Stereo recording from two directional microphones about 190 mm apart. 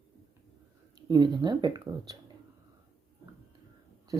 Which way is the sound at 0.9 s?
20° right (ahead or behind).